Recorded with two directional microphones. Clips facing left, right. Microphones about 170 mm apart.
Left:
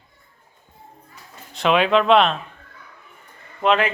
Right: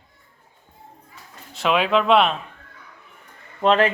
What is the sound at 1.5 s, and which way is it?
Speech, 5° right (ahead or behind).